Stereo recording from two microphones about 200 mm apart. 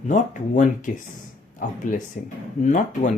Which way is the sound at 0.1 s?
40° left (ahead or behind).